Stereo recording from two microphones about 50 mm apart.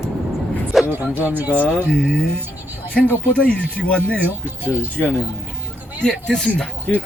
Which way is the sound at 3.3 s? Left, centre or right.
Left.